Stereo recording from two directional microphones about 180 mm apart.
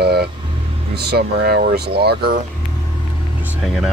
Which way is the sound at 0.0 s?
65° right (ahead or behind).